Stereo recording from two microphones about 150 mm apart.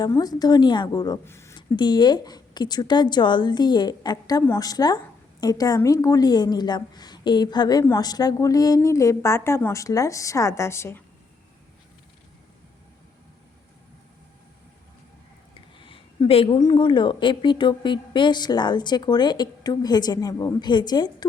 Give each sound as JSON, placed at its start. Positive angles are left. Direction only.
{"t": 0.1, "sound": "a woman's voice", "side_deg": 25}
{"t": 1.5, "sound": "a woman's voice", "side_deg": 30}
{"t": 15.8, "sound": "a sound", "side_deg": 35}
{"t": 16.6, "sound": "a woman's voice", "side_deg": 30}